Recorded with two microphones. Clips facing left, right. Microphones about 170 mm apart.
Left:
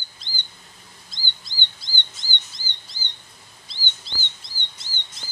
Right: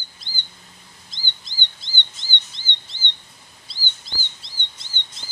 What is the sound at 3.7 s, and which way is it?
Bird vocalization, 40° right (ahead or behind).